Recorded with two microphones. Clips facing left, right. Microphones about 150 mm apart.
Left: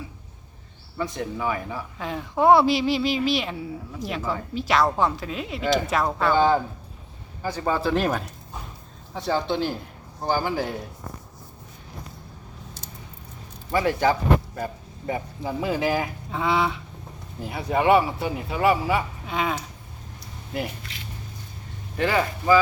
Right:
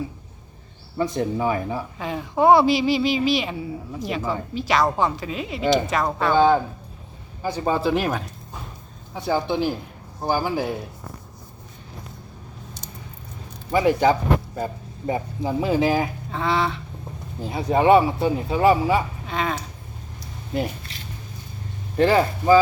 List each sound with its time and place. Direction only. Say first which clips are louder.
1.1 s speech: right 5 dB; 35° right (ahead or behind)
2.0 s speech: right 2 dB; centre (ahead or behind)
6.3 s a man's voice: right 4 dB; 15° right (ahead or behind)
7.9 s a man's voice: even; 5° right (ahead or behind)
13.7 s speech: right 4 dB; 20° right (ahead or behind)
16.3 s a sound: even; 10° left (ahead or behind)
17.4 s speech: right 3 dB; 20° right (ahead or behind)
19.3 s a sound: even; 5° left (ahead or behind)
20.5 s a sound: right 4 dB; 30° right (ahead or behind)
21.9 s speech: right 5 dB; 35° right (ahead or behind)